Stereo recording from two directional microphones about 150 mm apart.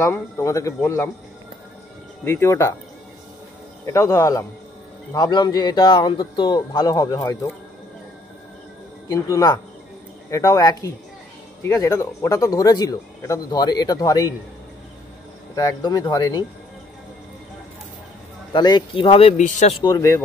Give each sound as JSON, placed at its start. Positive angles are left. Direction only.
{"t": 0.0, "sound": "speech", "side_deg": 20}
{"t": 2.2, "sound": "speech", "side_deg": 15}
{"t": 3.8, "sound": "speech", "side_deg": 20}
{"t": 9.1, "sound": "speech", "side_deg": 25}
{"t": 15.5, "sound": "speech", "side_deg": 25}
{"t": 18.5, "sound": "speech", "side_deg": 30}
{"t": 19.8, "sound": "speech", "side_deg": 25}